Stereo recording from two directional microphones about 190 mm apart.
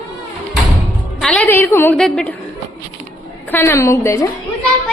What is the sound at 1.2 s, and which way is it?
A woman's voice, 5° left (ahead or behind).